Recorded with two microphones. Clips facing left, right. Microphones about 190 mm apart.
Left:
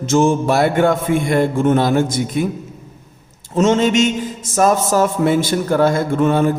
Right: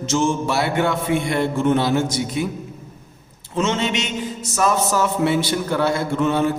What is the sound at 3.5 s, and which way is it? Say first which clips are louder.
Mantra: left 8 dB; 45° left (ahead or behind).